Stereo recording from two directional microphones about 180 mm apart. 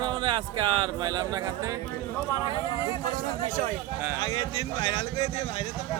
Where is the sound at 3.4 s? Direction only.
45° right (ahead or behind).